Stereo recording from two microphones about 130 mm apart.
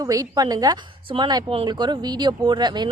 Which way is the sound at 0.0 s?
30° right (ahead or behind).